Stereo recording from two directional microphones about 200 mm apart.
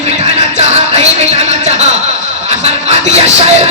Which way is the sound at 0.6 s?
30° right (ahead or behind).